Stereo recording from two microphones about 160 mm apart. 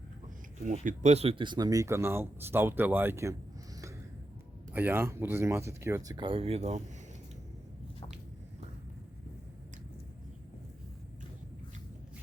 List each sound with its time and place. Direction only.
0.7 s speech: 45° right (ahead or behind); by 3.3 s 15° right (ahead or behind)
4.7 s speech: 15° right (ahead or behind); by 6.8 s 45° right (ahead or behind)